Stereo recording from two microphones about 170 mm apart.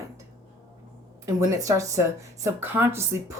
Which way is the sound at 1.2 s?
20° right (ahead or behind).